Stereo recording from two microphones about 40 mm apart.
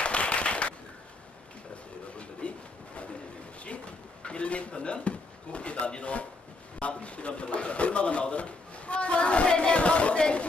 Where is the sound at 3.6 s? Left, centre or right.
Left.